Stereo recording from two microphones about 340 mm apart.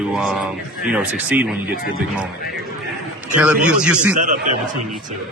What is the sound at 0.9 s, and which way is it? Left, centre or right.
Speech, centre.